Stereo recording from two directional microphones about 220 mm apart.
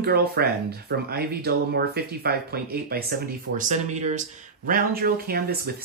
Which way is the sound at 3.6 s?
35° right (ahead or behind).